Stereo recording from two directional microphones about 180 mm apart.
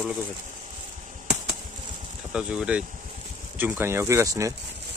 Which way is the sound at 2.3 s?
5° right (ahead or behind).